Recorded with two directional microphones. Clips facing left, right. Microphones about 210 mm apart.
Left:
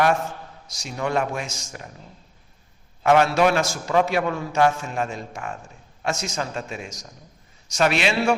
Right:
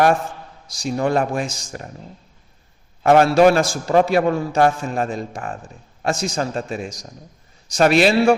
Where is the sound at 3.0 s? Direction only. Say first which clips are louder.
Right 5 dB; 35° right (ahead or behind).